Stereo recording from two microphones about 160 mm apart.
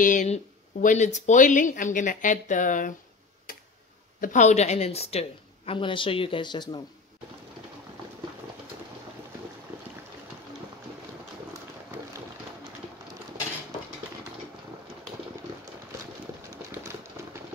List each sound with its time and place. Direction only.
0.0 s speech: 50° left (ahead or behind)
4.2 s speech: 50° left (ahead or behind); by 6.8 s 30° left (ahead or behind)
17.2 s a sound: 15° right (ahead or behind)